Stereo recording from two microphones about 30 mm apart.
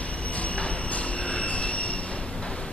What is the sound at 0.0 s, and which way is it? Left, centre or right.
Train, left.